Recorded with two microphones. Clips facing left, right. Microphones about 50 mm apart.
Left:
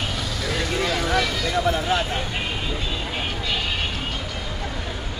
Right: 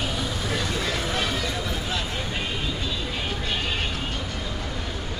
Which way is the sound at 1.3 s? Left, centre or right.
Left.